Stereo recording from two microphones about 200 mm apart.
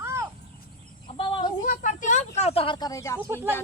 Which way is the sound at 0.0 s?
15° right (ahead or behind).